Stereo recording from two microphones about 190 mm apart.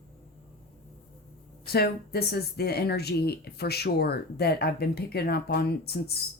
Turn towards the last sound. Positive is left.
turn(degrees=55)  # may be behind; listen again after turning